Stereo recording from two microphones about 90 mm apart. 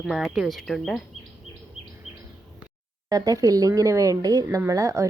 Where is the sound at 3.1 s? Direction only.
40° right (ahead or behind).